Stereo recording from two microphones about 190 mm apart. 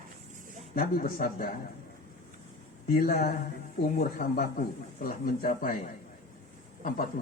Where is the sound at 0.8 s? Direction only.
50° left (ahead or behind).